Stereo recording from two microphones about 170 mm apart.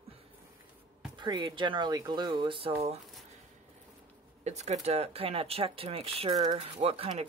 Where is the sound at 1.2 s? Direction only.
25° right (ahead or behind).